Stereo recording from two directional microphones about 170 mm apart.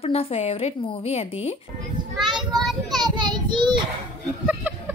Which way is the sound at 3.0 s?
25° right (ahead or behind).